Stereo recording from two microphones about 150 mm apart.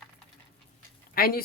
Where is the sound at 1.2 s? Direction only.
85° left.